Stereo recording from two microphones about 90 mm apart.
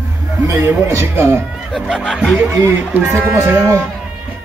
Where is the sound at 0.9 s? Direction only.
30° right (ahead or behind).